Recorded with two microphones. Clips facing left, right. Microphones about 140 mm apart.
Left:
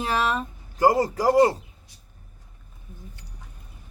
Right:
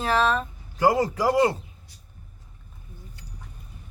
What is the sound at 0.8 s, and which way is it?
Speech, 40° left (ahead or behind).